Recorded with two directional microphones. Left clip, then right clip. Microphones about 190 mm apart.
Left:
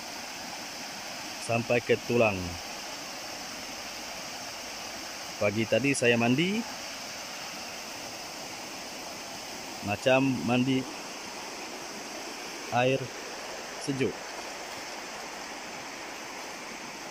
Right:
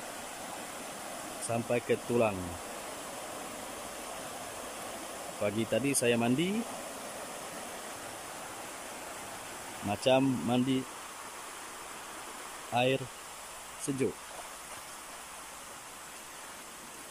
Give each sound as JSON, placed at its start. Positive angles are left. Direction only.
{"t": 1.5, "sound": "speech", "side_deg": 0}
{"t": 5.4, "sound": "speech", "side_deg": 0}
{"t": 9.8, "sound": "speech", "side_deg": -5}
{"t": 12.7, "sound": "speech", "side_deg": 0}